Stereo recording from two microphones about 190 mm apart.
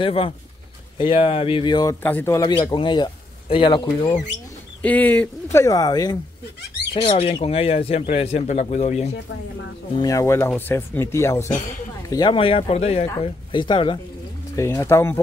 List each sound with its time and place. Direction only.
0.0 s speech: 30° left (ahead or behind)
2.0 s speech: 10° left (ahead or behind)
2.4 s speech: 25° left (ahead or behind)
4.8 s speech: 10° left (ahead or behind); by 9.1 s 35° left (ahead or behind)
9.9 s speech: 15° left (ahead or behind)
12.1 s speech: 25° left (ahead or behind)
14.5 s speech: 15° left (ahead or behind)